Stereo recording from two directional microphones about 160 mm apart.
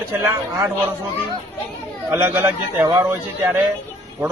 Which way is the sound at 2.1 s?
10° right (ahead or behind).